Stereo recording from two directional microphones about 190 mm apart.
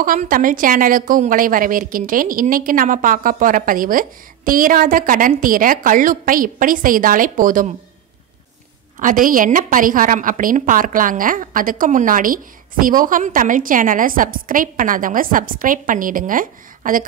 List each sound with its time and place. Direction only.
0.0 s a woman's voice: 45° right (ahead or behind)
9.0 s a woman's voice: 45° right (ahead or behind)